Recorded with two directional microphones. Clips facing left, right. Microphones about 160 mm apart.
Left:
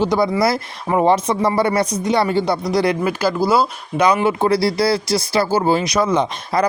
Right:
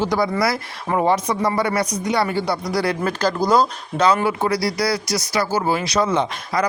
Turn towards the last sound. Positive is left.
turn(degrees=30)  # may be behind; listen again after turning